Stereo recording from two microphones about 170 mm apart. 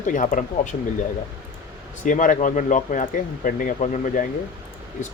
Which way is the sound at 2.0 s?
50° left (ahead or behind).